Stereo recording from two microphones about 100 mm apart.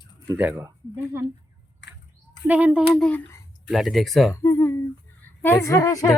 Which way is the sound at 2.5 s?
15° right (ahead or behind).